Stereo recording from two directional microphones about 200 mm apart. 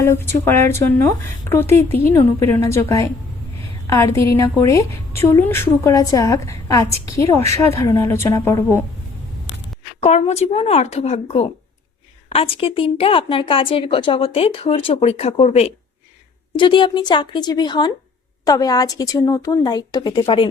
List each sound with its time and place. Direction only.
0.0 s speech: 10° left (ahead or behind)
10.0 s a woman's voice: 30° left (ahead or behind)